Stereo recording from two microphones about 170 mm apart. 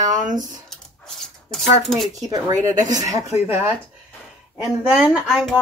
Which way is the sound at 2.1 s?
20° right (ahead or behind).